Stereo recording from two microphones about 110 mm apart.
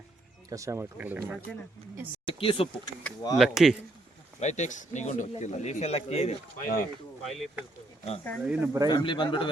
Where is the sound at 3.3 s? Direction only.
5° right (ahead or behind).